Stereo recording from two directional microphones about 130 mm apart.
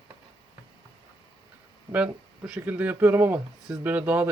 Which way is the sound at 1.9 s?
10° right (ahead or behind).